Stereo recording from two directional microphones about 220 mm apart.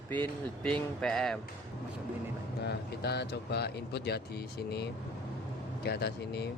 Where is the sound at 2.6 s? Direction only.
50° left (ahead or behind).